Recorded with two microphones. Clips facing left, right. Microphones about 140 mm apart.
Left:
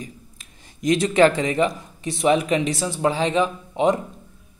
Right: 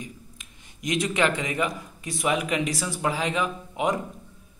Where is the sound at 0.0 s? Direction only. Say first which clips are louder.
Left 2 dB; 35° left (ahead or behind).